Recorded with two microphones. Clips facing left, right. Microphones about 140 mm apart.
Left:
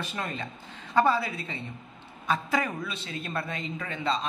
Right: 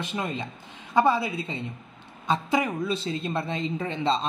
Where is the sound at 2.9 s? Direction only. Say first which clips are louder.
Right 7 dB; 30° right (ahead or behind).